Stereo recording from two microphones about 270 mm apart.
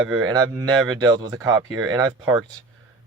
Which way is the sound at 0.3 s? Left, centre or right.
Centre.